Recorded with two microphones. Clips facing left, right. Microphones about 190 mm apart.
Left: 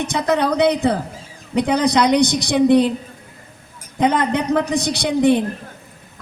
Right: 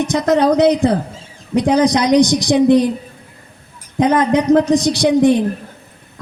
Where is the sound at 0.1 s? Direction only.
60° left (ahead or behind).